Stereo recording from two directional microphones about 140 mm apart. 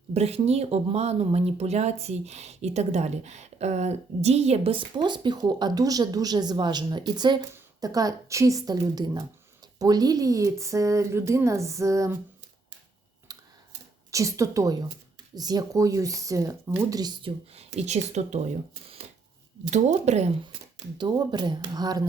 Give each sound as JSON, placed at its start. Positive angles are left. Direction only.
{"t": 0.1, "sound": "speech", "side_deg": -45}
{"t": 13.3, "sound": "camera", "side_deg": -25}
{"t": 14.1, "sound": "speech", "side_deg": -20}
{"t": 17.5, "sound": "speech", "side_deg": -45}
{"t": 19.7, "sound": "speech", "side_deg": -55}
{"t": 21.0, "sound": "speech", "side_deg": -30}